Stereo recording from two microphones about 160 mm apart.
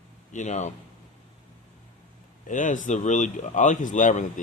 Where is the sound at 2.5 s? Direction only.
50° left (ahead or behind).